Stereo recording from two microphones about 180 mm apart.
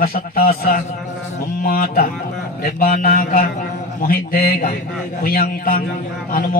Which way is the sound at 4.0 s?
55° left (ahead or behind).